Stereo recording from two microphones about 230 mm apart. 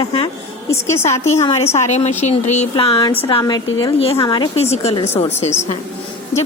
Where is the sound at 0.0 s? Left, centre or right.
Left.